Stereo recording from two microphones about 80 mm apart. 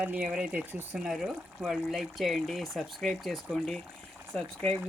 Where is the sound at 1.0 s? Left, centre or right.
Centre.